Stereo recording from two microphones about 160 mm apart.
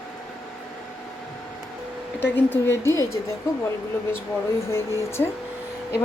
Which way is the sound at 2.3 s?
15° left (ahead or behind).